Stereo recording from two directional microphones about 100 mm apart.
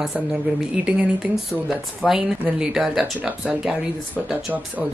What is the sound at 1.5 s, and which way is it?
Speech, 5° right (ahead or behind).